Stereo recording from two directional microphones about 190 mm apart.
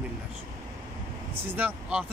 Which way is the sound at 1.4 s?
10° right (ahead or behind).